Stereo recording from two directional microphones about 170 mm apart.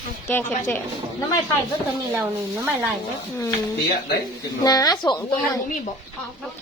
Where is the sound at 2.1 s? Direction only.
15° right (ahead or behind).